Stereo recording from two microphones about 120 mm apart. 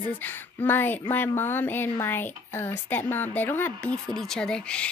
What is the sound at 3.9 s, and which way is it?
Speech, 5° left (ahead or behind).